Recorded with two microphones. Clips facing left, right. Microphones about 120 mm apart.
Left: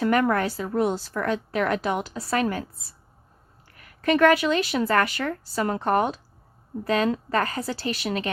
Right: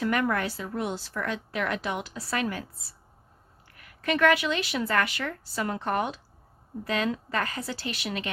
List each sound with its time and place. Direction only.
0.0 s a woman's voice: 40° left (ahead or behind)
3.7 s speech: 40° left (ahead or behind)